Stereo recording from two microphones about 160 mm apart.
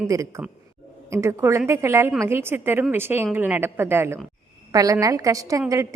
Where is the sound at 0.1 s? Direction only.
20° right (ahead or behind).